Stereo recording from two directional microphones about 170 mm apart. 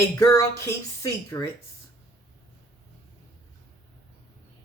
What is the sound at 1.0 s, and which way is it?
Speech, 15° left (ahead or behind).